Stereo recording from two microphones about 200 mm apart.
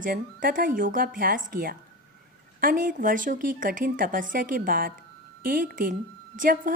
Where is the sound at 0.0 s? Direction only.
45° right (ahead or behind).